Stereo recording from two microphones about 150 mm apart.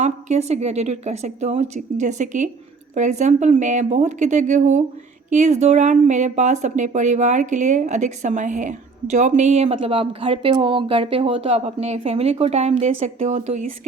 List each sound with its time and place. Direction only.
0.0 s speech: 50° right (ahead or behind)